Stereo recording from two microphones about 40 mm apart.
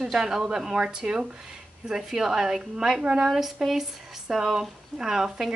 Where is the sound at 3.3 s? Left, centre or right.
Centre.